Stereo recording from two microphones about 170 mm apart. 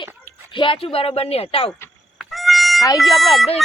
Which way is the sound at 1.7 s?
10° left (ahead or behind).